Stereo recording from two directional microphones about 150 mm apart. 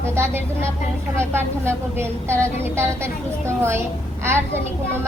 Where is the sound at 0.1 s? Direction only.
15° right (ahead or behind).